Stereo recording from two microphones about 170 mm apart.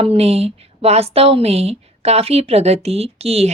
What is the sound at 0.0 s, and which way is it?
A woman's voice, 35° right (ahead or behind).